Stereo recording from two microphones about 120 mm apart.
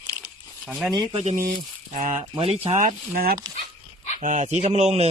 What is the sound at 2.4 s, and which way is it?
Speech, 55° right (ahead or behind).